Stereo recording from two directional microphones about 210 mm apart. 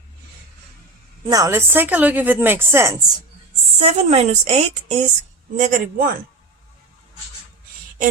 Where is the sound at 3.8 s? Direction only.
30° right (ahead or behind).